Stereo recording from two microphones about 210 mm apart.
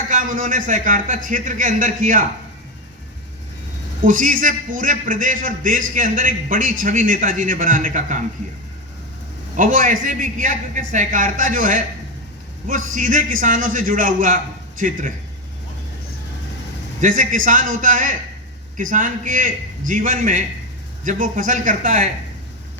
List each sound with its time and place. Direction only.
0.1 s a man's voice: 40° right (ahead or behind)
4.0 s a man's voice: 40° right (ahead or behind)
9.6 s a man's voice: 40° right (ahead or behind)
12.9 s a man's voice: 40° right (ahead or behind)
17.0 s a man's voice: 40° right (ahead or behind)